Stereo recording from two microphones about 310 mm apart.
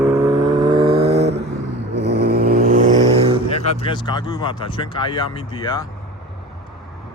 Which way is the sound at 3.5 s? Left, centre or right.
Centre.